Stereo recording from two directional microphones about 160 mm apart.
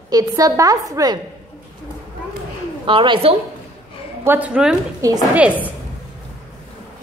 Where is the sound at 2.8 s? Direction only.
30° right (ahead or behind).